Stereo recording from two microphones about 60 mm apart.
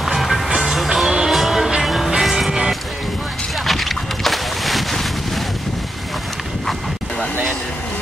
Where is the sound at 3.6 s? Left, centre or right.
Centre.